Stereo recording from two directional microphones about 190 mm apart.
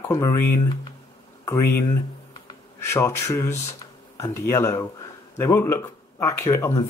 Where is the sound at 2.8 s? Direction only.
15° left (ahead or behind).